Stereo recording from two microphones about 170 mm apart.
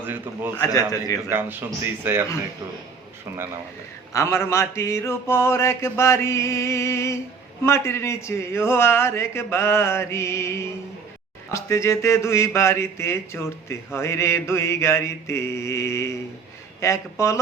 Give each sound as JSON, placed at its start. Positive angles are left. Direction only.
{"t": 0.0, "sound": "a man's voice", "side_deg": -10}
{"t": 0.6, "sound": "a man's voice", "side_deg": 20}
{"t": 1.3, "sound": "a man's voice", "side_deg": -10}
{"t": 4.1, "sound": "a sound", "side_deg": 15}